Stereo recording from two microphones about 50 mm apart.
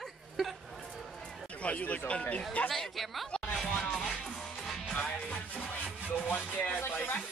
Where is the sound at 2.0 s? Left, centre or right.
Left.